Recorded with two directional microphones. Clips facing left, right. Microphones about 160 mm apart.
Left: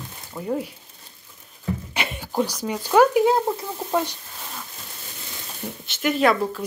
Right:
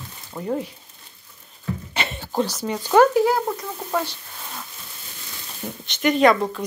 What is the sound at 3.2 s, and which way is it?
Speech, 25° left (ahead or behind).